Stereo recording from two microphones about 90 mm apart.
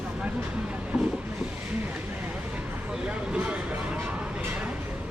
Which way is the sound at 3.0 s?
10° right (ahead or behind).